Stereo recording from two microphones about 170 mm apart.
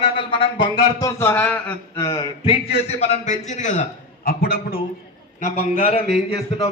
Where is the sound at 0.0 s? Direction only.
30° left (ahead or behind); by 1.7 s 10° left (ahead or behind).